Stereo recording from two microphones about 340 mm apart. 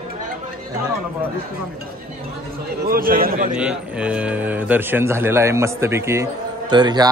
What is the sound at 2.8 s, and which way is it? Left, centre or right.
Speech, right.